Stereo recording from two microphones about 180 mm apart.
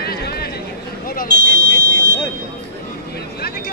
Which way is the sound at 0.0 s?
60° left (ahead or behind).